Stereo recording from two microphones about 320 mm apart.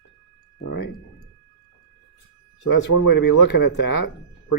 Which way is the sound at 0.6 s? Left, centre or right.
Left.